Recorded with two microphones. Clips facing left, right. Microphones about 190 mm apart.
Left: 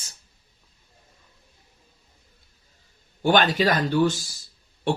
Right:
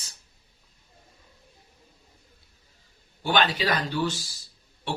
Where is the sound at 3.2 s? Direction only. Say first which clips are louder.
Left 5 dB; 45° left (ahead or behind).